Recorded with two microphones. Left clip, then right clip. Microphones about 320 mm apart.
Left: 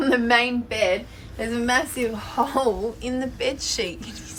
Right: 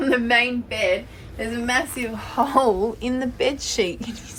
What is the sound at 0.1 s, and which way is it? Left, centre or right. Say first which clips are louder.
A woman's voice: right 1 dB; centre.